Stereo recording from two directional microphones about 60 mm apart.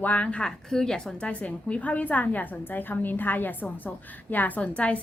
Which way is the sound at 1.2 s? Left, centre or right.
Centre.